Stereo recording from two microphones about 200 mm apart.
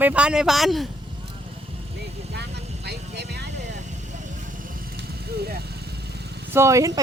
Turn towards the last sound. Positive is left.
turn(degrees=-15)  # may be behind; listen again after turning